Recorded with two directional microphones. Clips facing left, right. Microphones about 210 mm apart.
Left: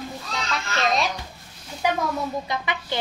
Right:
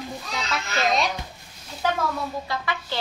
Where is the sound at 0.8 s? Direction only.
Centre (ahead or behind).